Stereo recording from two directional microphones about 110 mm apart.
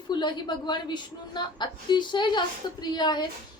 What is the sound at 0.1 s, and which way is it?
A woman's voice, 40° left (ahead or behind).